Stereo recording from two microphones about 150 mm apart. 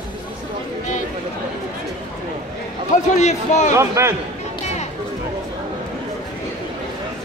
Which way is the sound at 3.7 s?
20° right (ahead or behind).